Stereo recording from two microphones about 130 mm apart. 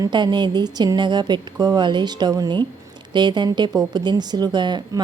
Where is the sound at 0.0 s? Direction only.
35° right (ahead or behind).